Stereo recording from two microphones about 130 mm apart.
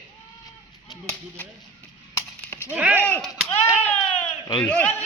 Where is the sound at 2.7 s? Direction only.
10° right (ahead or behind).